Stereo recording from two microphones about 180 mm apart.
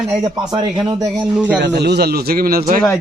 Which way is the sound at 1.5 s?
70° right (ahead or behind).